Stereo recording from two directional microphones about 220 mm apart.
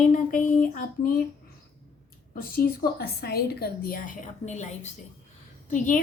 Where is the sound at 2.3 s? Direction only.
40° left (ahead or behind).